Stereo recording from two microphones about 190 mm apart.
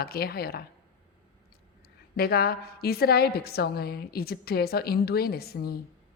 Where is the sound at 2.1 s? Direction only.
55° left (ahead or behind).